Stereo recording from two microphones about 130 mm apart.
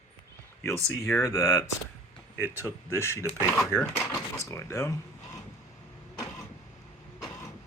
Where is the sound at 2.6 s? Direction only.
20° left (ahead or behind).